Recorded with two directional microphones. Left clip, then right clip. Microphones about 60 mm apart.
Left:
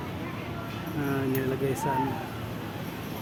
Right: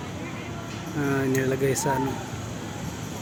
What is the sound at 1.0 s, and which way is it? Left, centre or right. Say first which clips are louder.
Speech: right 5 dB; right.